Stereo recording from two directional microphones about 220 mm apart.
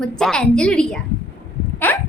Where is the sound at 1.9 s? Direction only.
10° left (ahead or behind).